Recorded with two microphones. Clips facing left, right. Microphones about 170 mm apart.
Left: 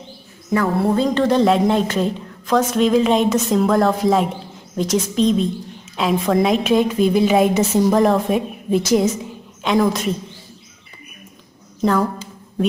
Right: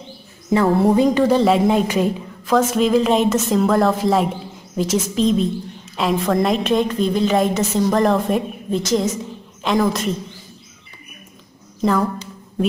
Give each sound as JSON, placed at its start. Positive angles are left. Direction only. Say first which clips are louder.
{"t": 0.5, "sound": "a sound", "louder": "right 3 dB", "side_deg": -25}
{"t": 1.0, "sound": "a woman's voice", "louder": "right 1 dB", "side_deg": -10}
{"t": 11.8, "sound": "a woman's voice", "louder": "even", "side_deg": 0}